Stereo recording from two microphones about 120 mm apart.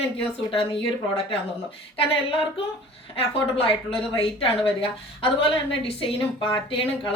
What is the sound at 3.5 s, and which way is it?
A woman's voice, 50° left (ahead or behind).